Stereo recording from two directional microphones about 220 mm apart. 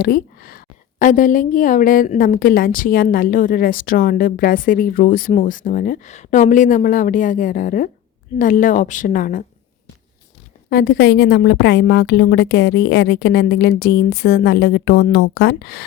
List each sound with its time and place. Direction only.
0.0 s a woman's voice: 40° left (ahead or behind)
10.7 s a woman's voice: 40° left (ahead or behind)